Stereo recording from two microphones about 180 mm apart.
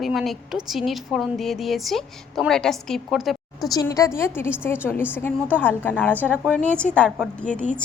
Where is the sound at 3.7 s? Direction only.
20° left (ahead or behind).